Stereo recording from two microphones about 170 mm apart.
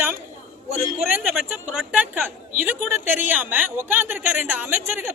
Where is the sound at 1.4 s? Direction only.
5° right (ahead or behind).